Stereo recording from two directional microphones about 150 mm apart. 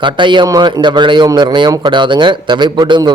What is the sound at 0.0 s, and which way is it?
A man's voice, 30° right (ahead or behind).